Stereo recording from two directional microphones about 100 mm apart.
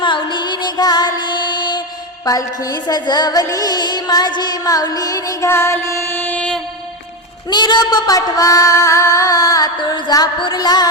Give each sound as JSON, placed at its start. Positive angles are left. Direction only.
{"t": 0.0, "sound": "music", "side_deg": 55}
{"t": 2.2, "sound": "music", "side_deg": 35}
{"t": 3.4, "sound": "singing", "side_deg": 40}
{"t": 5.5, "sound": "music", "side_deg": 25}
{"t": 7.5, "sound": "singing", "side_deg": 45}
{"t": 10.4, "sound": "music", "side_deg": 45}